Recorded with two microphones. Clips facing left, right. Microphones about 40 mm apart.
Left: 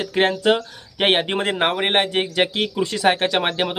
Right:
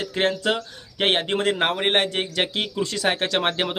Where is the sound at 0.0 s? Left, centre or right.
Left.